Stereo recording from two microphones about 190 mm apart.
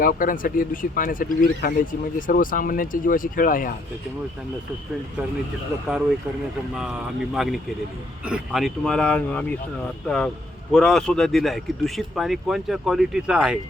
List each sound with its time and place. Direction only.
0.0 s speech: 50° left (ahead or behind)
7.3 s speech: centre (ahead or behind)
10.7 s speech: 5° left (ahead or behind)